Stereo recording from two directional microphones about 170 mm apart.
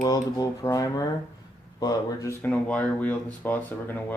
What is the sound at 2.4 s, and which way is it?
Speech, 5° left (ahead or behind).